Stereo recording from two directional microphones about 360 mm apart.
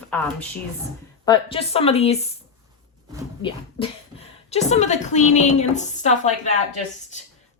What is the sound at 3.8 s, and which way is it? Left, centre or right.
Speech, centre.